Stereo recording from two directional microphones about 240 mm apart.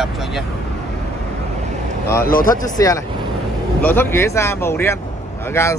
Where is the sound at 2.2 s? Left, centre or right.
Left.